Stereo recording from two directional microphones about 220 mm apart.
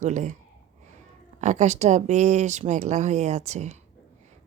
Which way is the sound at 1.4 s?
30° right (ahead or behind).